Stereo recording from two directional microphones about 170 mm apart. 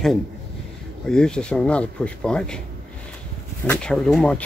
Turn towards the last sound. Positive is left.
turn(degrees=5)  # may be behind; listen again after turning